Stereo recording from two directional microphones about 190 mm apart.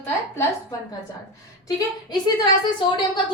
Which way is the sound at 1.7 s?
20° left (ahead or behind).